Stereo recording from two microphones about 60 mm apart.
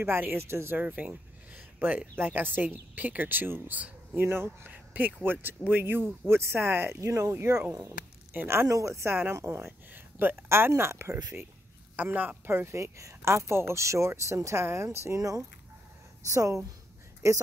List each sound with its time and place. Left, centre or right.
0.0 s speech: right
0.7 s a woman's voice: right
7.0 s speech: right
8.6 s speech: right
9.1 s a woman's voice: right
9.9 s speech: right
10.8 s a woman's voice: right
12.0 s a woman's voice: right